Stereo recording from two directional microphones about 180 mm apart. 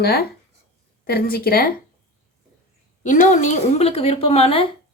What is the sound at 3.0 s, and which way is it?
Speech, 40° left (ahead or behind).